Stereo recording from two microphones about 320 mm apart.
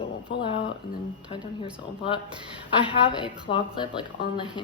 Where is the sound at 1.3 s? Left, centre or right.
Centre.